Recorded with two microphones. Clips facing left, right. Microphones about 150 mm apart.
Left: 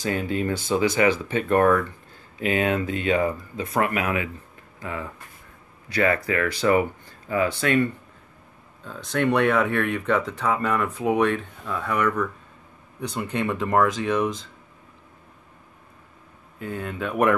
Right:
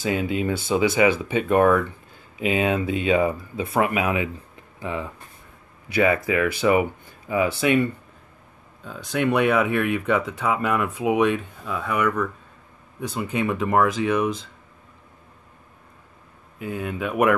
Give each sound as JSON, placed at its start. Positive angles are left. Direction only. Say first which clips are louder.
{"t": 0.0, "sound": "speech", "louder": "right 2 dB", "side_deg": -15}
{"t": 1.6, "sound": "speech", "louder": "right 1 dB", "side_deg": -5}
{"t": 2.3, "sound": "speech", "louder": "right 1 dB", "side_deg": -15}
{"t": 16.5, "sound": "speech", "louder": "right 2 dB", "side_deg": -10}